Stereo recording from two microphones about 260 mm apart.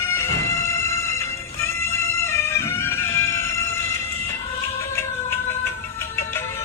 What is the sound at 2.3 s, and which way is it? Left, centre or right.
Music, centre.